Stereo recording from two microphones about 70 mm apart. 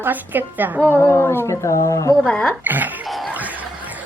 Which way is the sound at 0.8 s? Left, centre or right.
Left.